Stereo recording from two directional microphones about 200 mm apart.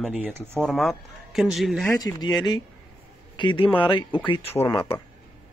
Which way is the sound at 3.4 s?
25° left (ahead or behind).